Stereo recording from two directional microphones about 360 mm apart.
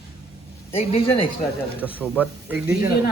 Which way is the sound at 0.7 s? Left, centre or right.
Centre.